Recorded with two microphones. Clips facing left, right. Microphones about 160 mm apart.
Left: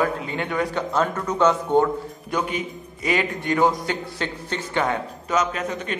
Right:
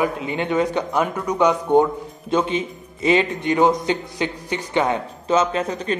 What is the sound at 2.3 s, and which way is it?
A man's voice, 25° right (ahead or behind).